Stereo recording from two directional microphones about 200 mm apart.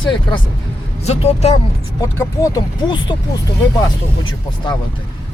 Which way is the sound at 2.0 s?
15° left (ahead or behind).